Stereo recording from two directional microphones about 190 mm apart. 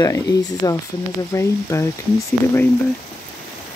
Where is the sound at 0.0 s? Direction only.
20° left (ahead or behind).